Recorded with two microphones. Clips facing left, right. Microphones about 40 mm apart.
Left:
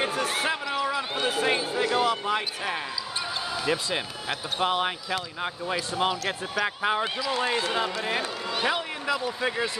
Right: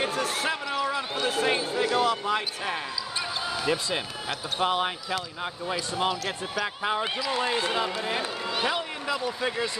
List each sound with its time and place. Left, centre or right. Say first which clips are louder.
0.0 s speech: left 1 dB; centre
7.2 s a man's voice: even; centre
8.6 s speech: left 3 dB; centre